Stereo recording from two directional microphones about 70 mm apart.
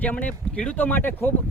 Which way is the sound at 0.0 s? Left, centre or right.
Left.